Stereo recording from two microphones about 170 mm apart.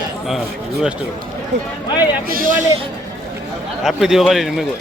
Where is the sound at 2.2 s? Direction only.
60° right (ahead or behind).